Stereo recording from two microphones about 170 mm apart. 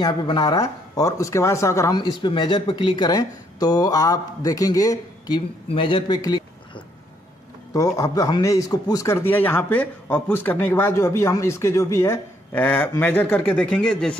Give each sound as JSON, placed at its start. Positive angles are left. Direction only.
{"t": 0.0, "sound": "speech", "side_deg": 25}